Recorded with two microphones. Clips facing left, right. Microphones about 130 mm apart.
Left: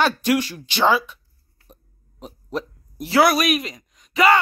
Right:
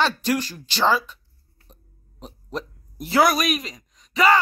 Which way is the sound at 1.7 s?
5° left (ahead or behind).